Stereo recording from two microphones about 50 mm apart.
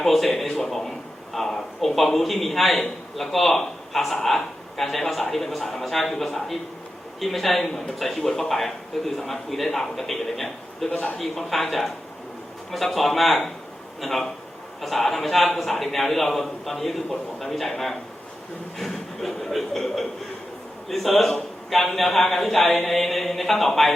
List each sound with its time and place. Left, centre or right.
0.0 s a man's voice: centre
10.8 s a man's voice: left
11.2 s a man's voice: centre